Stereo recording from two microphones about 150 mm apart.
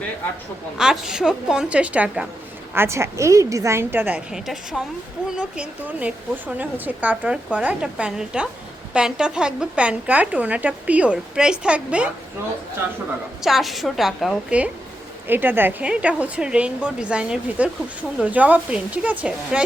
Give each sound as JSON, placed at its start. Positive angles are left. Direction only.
{"t": 0.8, "sound": "a woman's voice", "side_deg": -5}
{"t": 13.4, "sound": "a woman's voice", "side_deg": 0}